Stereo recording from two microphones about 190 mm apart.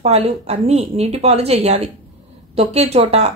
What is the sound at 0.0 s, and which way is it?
Speech, 35° right (ahead or behind).